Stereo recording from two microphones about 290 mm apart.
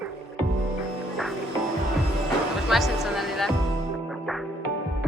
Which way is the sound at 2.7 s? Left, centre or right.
Centre.